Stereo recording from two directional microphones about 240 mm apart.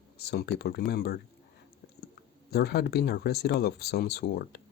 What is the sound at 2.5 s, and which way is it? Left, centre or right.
Speech, left.